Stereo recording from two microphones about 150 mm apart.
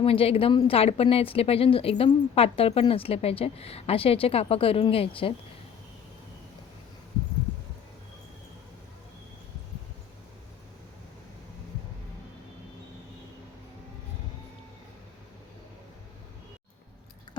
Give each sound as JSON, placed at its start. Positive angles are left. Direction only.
{"t": 0.0, "sound": "speech", "side_deg": 40}